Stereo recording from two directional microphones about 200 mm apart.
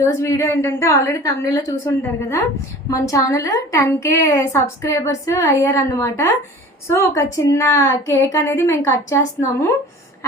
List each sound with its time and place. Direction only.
0.0 s a woman's voice: 15° left (ahead or behind)